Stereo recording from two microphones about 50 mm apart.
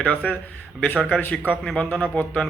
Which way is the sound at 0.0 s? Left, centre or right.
Left.